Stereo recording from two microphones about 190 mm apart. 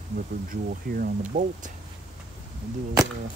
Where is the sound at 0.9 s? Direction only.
50° right (ahead or behind).